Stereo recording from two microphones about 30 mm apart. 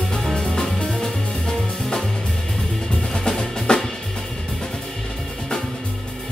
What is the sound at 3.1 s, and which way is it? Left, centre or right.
Drum, left.